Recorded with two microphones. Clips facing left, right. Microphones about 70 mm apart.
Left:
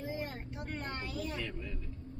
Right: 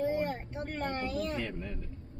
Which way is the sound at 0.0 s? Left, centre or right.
Right.